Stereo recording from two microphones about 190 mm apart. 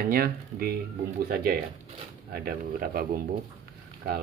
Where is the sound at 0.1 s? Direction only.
50° right (ahead or behind).